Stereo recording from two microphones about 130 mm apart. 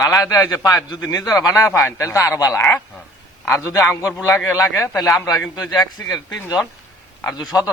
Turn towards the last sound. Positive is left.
turn(degrees=30)  # may be behind; listen again after turning